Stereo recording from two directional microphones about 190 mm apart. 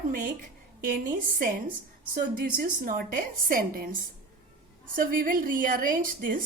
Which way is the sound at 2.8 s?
45° right (ahead or behind).